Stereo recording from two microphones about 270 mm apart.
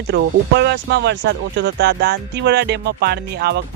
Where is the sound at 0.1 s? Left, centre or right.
Right.